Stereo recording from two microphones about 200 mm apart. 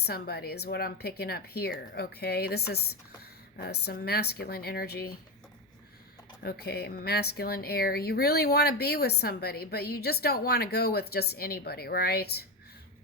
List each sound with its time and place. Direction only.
0.0 s speech: 50° left (ahead or behind)
6.4 s speech: 50° left (ahead or behind)